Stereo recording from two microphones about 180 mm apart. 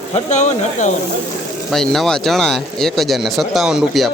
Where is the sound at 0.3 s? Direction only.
40° left (ahead or behind).